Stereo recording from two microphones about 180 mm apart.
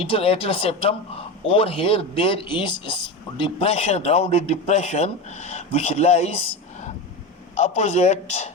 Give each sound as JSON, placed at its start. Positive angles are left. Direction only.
{"t": 0.0, "sound": "a man's voice", "side_deg": 35}
{"t": 7.5, "sound": "a man's voice", "side_deg": 40}